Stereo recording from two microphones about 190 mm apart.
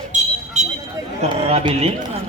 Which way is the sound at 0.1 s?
35° right (ahead or behind).